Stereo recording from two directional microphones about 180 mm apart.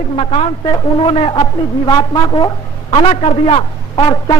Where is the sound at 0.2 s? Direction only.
35° left (ahead or behind).